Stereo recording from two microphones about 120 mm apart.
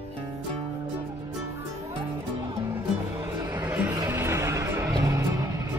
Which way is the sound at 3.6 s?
15° right (ahead or behind).